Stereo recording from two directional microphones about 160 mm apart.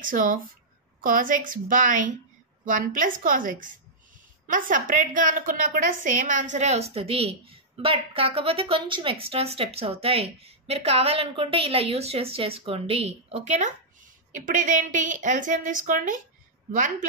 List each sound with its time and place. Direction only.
0.0 s a woman's voice: 60° right (ahead or behind)